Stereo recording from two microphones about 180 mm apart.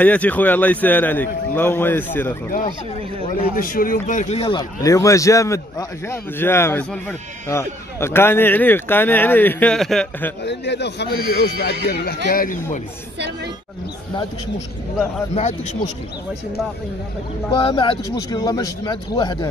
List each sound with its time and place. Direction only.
0.0 s a man's voice: 10° left (ahead or behind)
3.5 s speech: 50° left (ahead or behind)
4.6 s a man's voice: 20° left (ahead or behind); by 10.3 s centre (ahead or behind)
10.4 s speech: 70° left (ahead or behind); by 12.5 s 50° left (ahead or behind)
15.3 s speech: 40° left (ahead or behind)
17.5 s speech: 30° left (ahead or behind)